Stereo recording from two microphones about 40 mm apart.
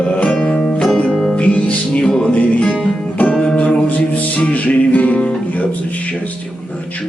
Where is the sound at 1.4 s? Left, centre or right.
Left.